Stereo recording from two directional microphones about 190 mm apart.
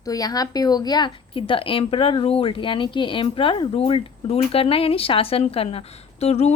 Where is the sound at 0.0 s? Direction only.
20° left (ahead or behind).